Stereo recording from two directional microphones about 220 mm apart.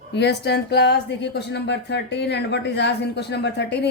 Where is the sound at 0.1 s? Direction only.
50° left (ahead or behind).